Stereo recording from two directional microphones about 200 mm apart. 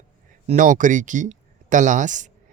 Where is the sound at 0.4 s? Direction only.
40° right (ahead or behind).